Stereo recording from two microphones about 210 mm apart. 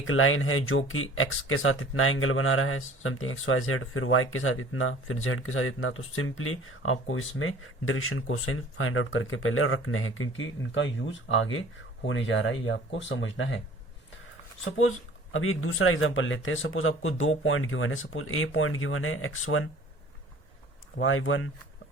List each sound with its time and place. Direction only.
0.0 s speech: 75° left (ahead or behind)
14.8 s speech: 75° left (ahead or behind)
20.9 s speech: 70° left (ahead or behind)